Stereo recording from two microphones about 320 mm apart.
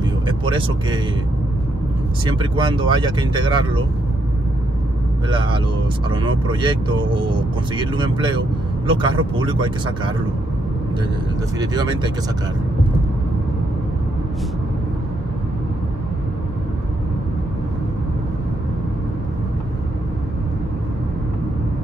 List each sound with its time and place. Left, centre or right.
0.3 s speech: centre
2.2 s speech: centre
5.3 s speech: centre
11.6 s speech: centre